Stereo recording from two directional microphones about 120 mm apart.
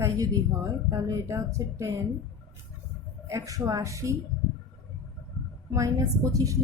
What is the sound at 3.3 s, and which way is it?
Speech, 30° right (ahead or behind).